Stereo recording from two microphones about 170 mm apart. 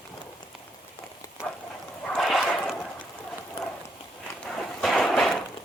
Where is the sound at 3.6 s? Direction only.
35° left (ahead or behind).